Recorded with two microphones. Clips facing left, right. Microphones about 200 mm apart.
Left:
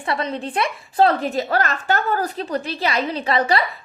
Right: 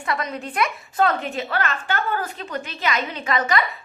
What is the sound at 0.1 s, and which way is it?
A woman's voice, 30° left (ahead or behind).